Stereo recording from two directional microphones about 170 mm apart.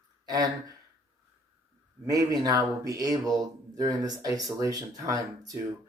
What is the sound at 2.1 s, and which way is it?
Speech, 20° right (ahead or behind).